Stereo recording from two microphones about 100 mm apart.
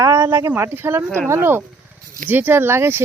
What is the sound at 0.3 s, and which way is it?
Speech, 30° right (ahead or behind).